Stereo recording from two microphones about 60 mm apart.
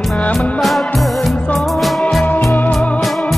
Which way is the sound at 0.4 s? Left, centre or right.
Centre.